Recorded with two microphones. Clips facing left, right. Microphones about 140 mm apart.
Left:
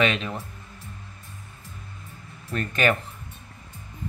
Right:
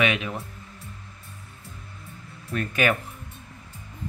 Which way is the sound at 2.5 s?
10° right (ahead or behind).